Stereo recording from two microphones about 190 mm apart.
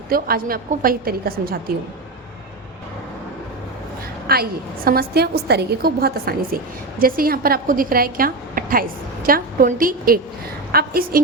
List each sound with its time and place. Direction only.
0.1 s a woman's voice: 50° right (ahead or behind)
4.3 s a woman's voice: 50° right (ahead or behind)